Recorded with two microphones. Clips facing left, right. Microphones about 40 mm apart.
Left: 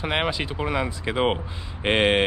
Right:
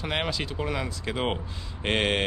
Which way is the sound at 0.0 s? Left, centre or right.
Left.